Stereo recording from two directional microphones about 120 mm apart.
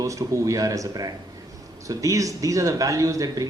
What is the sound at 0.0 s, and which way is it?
A man's voice, 25° right (ahead or behind).